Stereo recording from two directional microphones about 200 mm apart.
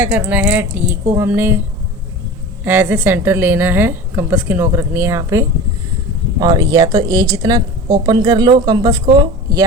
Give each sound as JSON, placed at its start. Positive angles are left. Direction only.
{"t": 0.0, "sound": "a woman's voice", "side_deg": -10}
{"t": 2.6, "sound": "a woman's voice", "side_deg": -10}